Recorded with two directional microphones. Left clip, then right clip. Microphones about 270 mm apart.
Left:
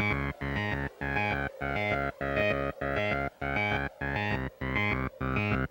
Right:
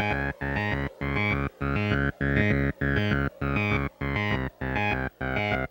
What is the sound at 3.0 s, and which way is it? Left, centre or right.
Music, right.